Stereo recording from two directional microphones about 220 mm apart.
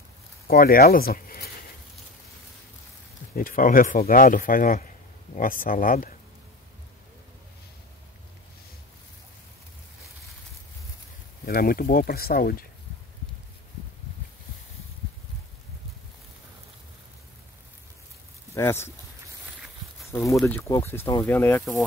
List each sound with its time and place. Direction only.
0.5 s speech: 45° left (ahead or behind)
3.3 s speech: 40° left (ahead or behind)
11.4 s speech: 45° left (ahead or behind)
18.5 s speech: 10° left (ahead or behind)
20.1 s speech: 15° left (ahead or behind)